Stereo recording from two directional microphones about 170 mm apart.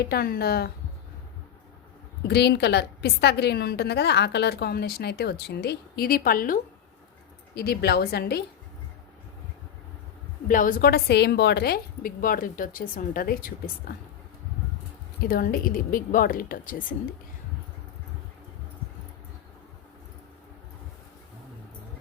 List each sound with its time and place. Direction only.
0.0 s a woman's voice: 65° left (ahead or behind)
2.2 s a woman's voice: 75° left (ahead or behind); by 6.6 s 55° left (ahead or behind)
7.5 s a woman's voice: 70° left (ahead or behind)
10.5 s a woman's voice: 55° left (ahead or behind)
15.2 s a woman's voice: 60° left (ahead or behind)